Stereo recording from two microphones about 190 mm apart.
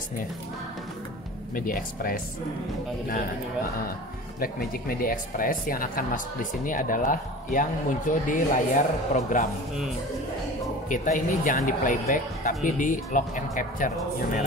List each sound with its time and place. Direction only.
1.5 s speech: 45° left (ahead or behind)
4.4 s speech: 50° left (ahead or behind)
10.9 s speech: 45° left (ahead or behind)